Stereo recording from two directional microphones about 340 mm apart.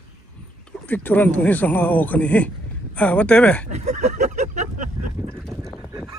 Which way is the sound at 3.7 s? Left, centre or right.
Centre.